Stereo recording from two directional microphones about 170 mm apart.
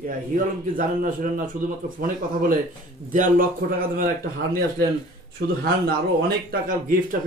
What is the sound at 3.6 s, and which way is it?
Speech, 55° right (ahead or behind).